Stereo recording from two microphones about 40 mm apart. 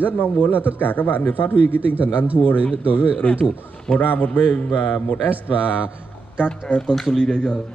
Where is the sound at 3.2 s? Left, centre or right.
Left.